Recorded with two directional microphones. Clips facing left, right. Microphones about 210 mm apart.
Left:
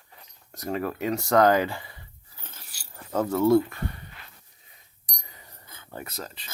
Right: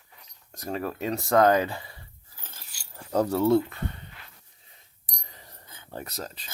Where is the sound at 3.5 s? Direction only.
20° right (ahead or behind).